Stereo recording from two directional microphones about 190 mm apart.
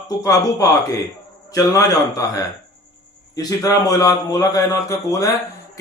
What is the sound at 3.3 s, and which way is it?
A man's voice, 20° left (ahead or behind).